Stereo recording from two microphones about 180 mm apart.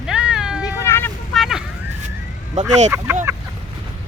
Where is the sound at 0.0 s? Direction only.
5° right (ahead or behind).